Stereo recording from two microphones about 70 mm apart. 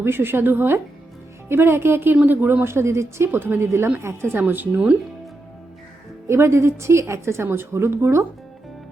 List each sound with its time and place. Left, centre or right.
0.0 s a woman's voice: right
3.3 s a woman's voice: right
6.2 s a woman's voice: right